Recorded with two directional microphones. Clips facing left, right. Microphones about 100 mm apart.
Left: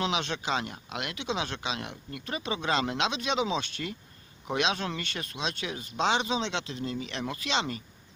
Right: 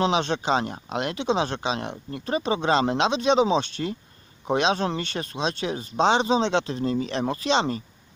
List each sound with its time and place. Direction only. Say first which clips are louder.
0.0 s speech: right 7 dB; 35° right (ahead or behind)